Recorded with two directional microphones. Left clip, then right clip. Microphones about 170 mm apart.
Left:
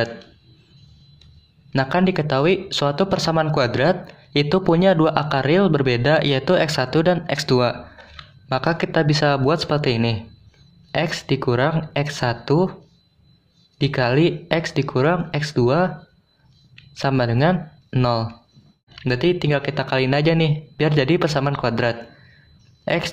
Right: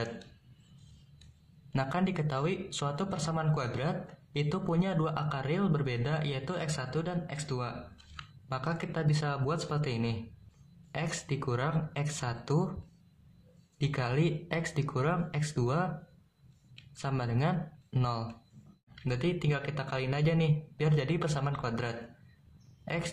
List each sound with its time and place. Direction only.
1.8 s speech: 30° left (ahead or behind)
13.7 s speech: 30° left (ahead or behind)
17.0 s speech: 30° left (ahead or behind)